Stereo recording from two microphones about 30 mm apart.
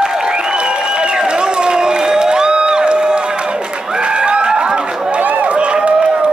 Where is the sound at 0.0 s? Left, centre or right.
Right.